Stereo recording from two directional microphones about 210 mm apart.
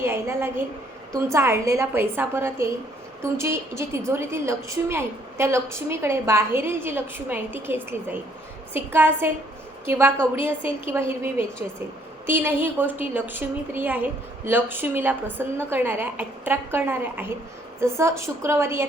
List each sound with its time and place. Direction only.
0.0 s a woman's voice: 10° right (ahead or behind)